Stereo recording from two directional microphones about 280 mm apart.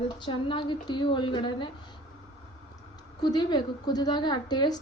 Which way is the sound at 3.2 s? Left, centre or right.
Centre.